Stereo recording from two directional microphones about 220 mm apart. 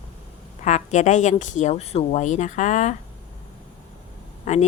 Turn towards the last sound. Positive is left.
turn(degrees=30)  # may be behind; listen again after turning